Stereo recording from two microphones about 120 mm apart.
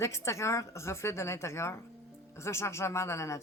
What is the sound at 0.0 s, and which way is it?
Speech, 25° left (ahead or behind).